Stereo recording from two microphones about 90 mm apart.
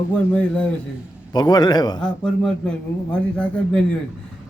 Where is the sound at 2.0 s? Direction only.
10° left (ahead or behind).